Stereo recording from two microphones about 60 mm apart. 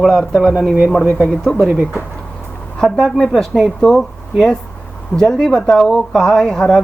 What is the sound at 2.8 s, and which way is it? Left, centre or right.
Speech, centre.